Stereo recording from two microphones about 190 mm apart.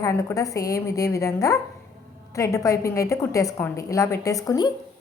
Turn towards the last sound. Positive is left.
turn(degrees=20)  # may be behind; listen again after turning